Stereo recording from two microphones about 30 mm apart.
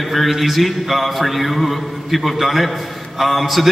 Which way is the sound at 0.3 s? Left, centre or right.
Centre.